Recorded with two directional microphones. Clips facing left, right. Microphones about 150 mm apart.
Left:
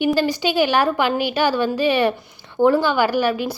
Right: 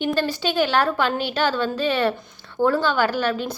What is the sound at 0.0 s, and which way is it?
A woman's voice, 10° left (ahead or behind).